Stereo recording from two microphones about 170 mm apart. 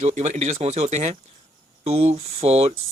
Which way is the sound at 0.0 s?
40° right (ahead or behind).